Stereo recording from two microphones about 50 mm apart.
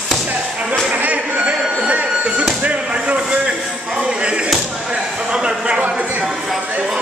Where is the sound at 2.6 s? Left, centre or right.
Right.